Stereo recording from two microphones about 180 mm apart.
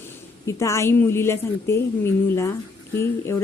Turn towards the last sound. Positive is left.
turn(degrees=15)  # may be behind; listen again after turning